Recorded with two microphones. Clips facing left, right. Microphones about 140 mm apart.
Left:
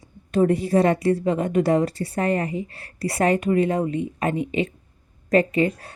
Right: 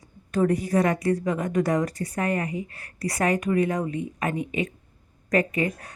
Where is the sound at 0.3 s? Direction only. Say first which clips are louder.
Left 3 dB; 25° left (ahead or behind).